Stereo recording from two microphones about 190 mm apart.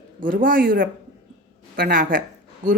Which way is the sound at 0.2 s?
45° right (ahead or behind).